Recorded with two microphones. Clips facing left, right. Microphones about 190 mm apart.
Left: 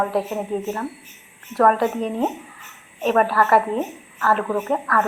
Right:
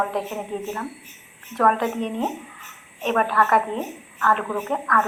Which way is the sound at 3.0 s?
5° left (ahead or behind).